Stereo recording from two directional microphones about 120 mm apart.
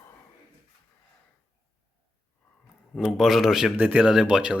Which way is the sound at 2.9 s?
Centre (ahead or behind).